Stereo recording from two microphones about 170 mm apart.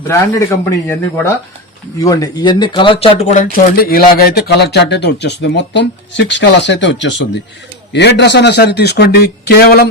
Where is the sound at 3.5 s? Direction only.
60° left (ahead or behind).